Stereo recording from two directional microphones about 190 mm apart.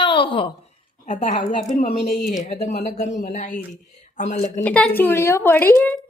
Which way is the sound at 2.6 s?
35° left (ahead or behind).